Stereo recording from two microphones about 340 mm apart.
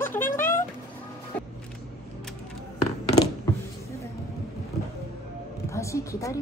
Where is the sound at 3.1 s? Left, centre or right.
Centre.